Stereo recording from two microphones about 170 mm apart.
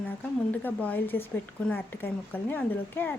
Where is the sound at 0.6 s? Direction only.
10° left (ahead or behind).